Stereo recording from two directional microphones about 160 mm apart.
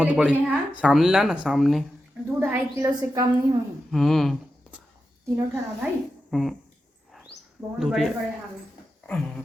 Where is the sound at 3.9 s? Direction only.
Centre (ahead or behind).